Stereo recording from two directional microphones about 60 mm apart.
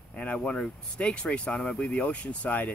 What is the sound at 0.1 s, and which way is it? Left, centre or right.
Speech, left.